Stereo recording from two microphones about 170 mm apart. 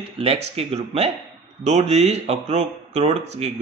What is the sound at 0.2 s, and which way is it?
A man's voice, 35° right (ahead or behind).